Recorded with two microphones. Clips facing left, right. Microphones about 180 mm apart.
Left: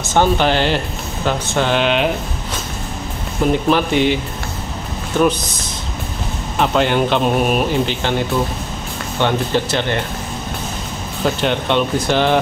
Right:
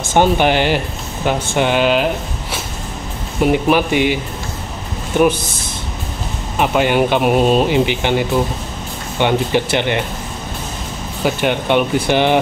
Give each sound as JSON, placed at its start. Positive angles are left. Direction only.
{"t": 0.1, "sound": "speech", "side_deg": -15}
{"t": 3.4, "sound": "speech", "side_deg": -15}
{"t": 6.6, "sound": "speech", "side_deg": -10}
{"t": 11.2, "sound": "speech", "side_deg": -10}